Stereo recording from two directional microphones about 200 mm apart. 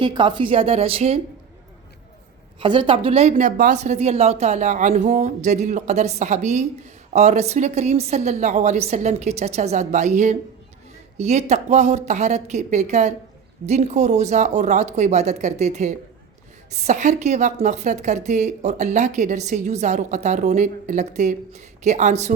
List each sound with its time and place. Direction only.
0.0 s a woman's voice: 25° right (ahead or behind)
2.6 s a woman's voice: 25° right (ahead or behind)